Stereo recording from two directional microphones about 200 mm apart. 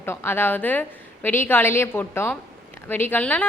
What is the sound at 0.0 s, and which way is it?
A woman's voice, 10° left (ahead or behind).